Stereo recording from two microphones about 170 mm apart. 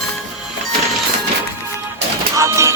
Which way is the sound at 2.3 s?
15° right (ahead or behind).